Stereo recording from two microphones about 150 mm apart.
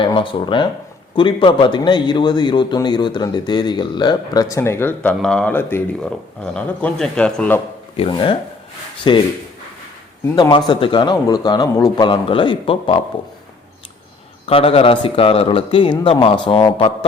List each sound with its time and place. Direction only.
0.0 s a man's voice: 35° left (ahead or behind); by 7.6 s 10° left (ahead or behind)
7.9 s a man's voice: 35° left (ahead or behind)
10.3 s a man's voice: 25° left (ahead or behind)
14.4 s a man's voice: 40° left (ahead or behind)